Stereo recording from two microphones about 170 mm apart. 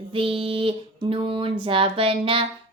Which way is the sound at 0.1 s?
30° right (ahead or behind).